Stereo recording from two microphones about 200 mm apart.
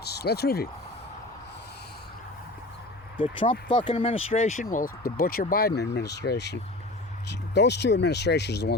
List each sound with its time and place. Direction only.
0.1 s speech: 55° left (ahead or behind)
3.7 s speech: 25° left (ahead or behind); by 8.7 s 55° left (ahead or behind)